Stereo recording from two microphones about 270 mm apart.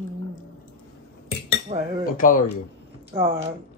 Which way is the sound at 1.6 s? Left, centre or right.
Centre.